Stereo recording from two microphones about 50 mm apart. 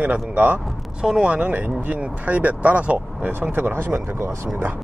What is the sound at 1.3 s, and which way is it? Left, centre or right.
Speech, right.